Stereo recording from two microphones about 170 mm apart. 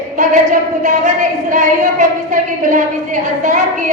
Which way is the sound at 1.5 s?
50° right (ahead or behind).